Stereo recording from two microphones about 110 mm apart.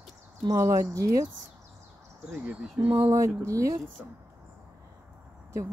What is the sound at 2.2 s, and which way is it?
Speech, 5° right (ahead or behind).